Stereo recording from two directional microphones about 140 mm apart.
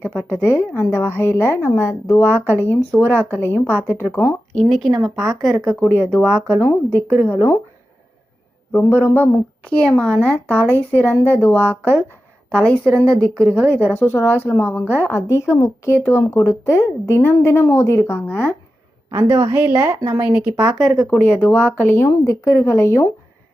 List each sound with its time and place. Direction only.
0.4 s a woman's voice: 15° left (ahead or behind)
4.5 s a woman's voice: centre (ahead or behind); by 7.5 s 15° left (ahead or behind)
8.7 s a woman's voice: 15° left (ahead or behind)
19.5 s speech: 10° right (ahead or behind)
19.8 s speech: 25° right (ahead or behind)
20.1 s speech: 10° right (ahead or behind)
20.7 s speech: centre (ahead or behind)
21.4 s a woman's voice: 10° left (ahead or behind)